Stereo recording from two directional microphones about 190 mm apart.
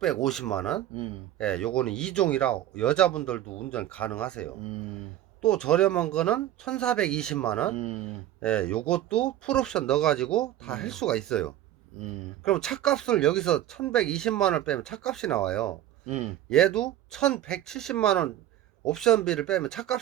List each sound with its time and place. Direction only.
0.0 s speech: centre (ahead or behind)
7.8 s speech: 35° right (ahead or behind)
8.0 s speech: 5° left (ahead or behind)
16.0 s speech: 35° right (ahead or behind)
16.5 s speech: 5° left (ahead or behind)